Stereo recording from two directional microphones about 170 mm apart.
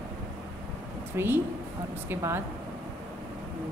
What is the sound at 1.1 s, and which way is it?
Speech, 15° right (ahead or behind).